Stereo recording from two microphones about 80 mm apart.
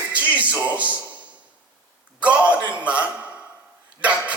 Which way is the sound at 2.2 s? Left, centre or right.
Centre.